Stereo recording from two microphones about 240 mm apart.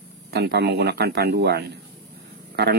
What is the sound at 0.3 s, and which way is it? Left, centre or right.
A man's voice, right.